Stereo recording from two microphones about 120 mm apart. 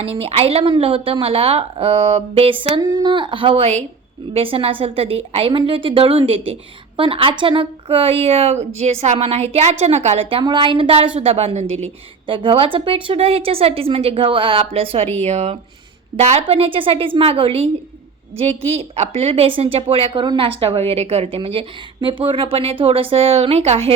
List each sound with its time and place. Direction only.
0.0 s a woman's voice: 55° right (ahead or behind)
2.8 s a woman's voice: 35° right (ahead or behind); by 10.2 s 65° right (ahead or behind)
10.4 s a woman's voice: 45° right (ahead or behind); by 11.6 s 60° right (ahead or behind)
12.3 s a woman's voice: 45° right (ahead or behind)
15.2 s a woman's voice: 65° right (ahead or behind)